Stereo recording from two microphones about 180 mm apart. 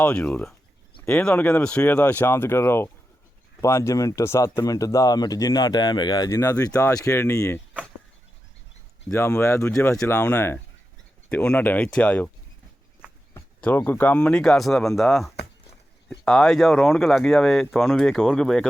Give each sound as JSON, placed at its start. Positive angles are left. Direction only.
{"t": 0.0, "sound": "speech", "side_deg": 5}
{"t": 9.1, "sound": "speech", "side_deg": 15}
{"t": 13.3, "sound": "speech", "side_deg": 10}